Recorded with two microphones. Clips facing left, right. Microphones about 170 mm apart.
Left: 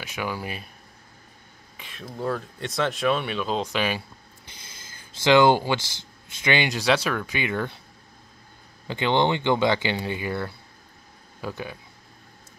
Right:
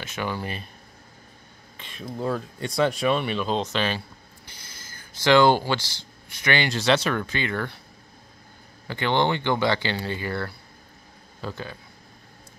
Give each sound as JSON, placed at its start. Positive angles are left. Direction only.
{"t": 0.0, "sound": "speech", "side_deg": 10}
{"t": 1.8, "sound": "speech", "side_deg": 5}
{"t": 4.9, "sound": "speech", "side_deg": 20}
{"t": 8.8, "sound": "speech", "side_deg": 20}